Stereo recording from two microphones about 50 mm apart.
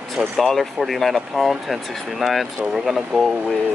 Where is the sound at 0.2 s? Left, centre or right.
Centre.